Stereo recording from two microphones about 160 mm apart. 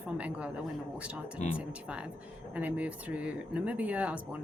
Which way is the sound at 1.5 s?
5° right (ahead or behind).